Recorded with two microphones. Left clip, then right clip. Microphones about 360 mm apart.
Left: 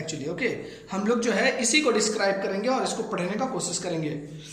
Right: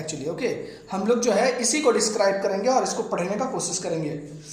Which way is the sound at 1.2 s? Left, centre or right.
Centre.